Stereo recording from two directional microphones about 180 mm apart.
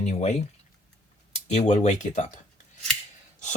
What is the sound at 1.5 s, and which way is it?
Speech, 40° left (ahead or behind).